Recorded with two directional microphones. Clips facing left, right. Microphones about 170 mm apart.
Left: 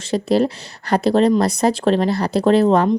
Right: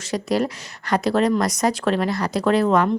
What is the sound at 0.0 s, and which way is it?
A woman's voice, 30° left (ahead or behind).